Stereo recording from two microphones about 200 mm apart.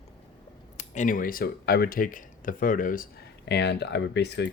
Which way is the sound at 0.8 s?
40° left (ahead or behind).